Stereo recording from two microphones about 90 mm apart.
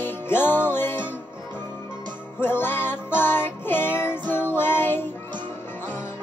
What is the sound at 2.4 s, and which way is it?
Music, 25° left (ahead or behind).